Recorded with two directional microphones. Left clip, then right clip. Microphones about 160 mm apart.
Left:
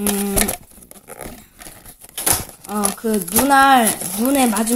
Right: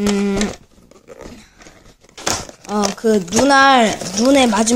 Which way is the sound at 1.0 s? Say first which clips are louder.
Left 1 dB; 25° left (ahead or behind).